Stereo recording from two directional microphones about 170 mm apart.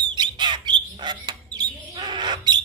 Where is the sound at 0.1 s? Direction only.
25° right (ahead or behind).